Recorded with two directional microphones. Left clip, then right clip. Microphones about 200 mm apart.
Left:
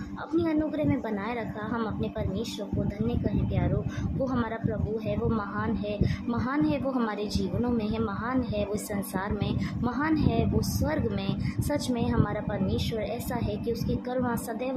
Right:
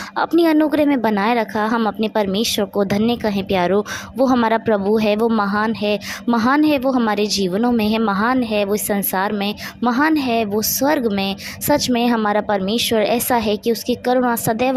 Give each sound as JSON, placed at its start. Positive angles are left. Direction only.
{"t": 0.2, "sound": "a woman's voice", "side_deg": -45}